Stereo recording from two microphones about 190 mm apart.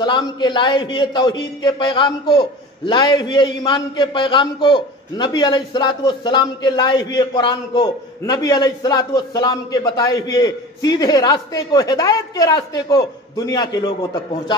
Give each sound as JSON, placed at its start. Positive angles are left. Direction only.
{"t": 0.0, "sound": "a man's voice", "side_deg": 25}